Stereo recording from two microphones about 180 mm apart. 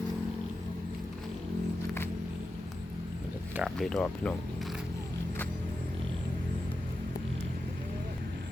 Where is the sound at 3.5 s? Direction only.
Centre (ahead or behind).